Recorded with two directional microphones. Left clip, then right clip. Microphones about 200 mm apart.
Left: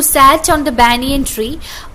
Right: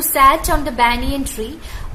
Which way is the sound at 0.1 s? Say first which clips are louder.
Left 4 dB; 25° left (ahead or behind).